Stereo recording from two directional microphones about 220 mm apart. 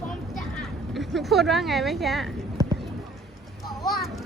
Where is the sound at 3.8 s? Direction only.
Centre (ahead or behind).